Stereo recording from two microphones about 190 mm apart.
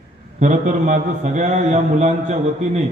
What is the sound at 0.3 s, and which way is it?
A man's voice, 40° right (ahead or behind).